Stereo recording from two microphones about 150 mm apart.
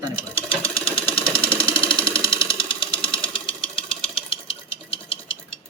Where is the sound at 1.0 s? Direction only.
10° left (ahead or behind).